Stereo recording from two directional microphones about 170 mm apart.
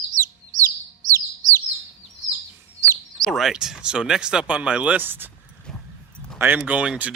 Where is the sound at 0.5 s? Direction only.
50° right (ahead or behind).